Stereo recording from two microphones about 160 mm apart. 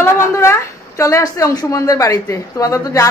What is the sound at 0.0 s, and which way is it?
A woman's voice, 15° left (ahead or behind).